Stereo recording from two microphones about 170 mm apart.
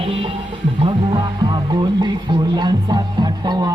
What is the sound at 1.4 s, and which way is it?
Music, 25° right (ahead or behind).